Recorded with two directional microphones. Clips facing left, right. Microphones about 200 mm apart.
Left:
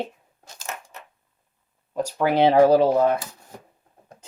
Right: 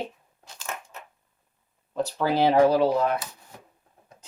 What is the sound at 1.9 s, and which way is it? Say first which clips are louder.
Speech: left 3 dB; 15° left (ahead or behind).